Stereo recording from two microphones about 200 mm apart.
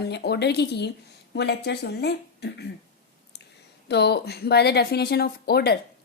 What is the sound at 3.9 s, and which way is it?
Speech, 55° left (ahead or behind).